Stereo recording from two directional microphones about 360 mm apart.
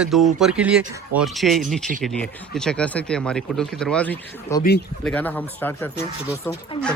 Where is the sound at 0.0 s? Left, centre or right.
Centre.